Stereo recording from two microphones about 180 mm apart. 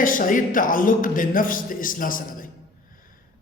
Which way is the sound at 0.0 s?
50° left (ahead or behind).